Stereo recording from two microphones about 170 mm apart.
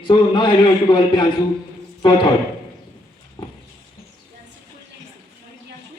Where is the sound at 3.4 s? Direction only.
25° left (ahead or behind).